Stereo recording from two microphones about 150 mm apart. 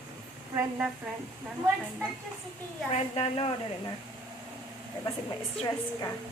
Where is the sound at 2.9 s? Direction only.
40° left (ahead or behind).